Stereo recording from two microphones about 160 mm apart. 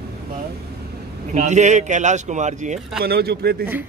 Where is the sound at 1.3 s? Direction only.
45° right (ahead or behind).